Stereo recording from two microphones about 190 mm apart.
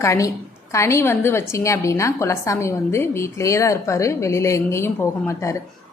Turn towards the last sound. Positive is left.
turn(degrees=15)  # may be behind; listen again after turning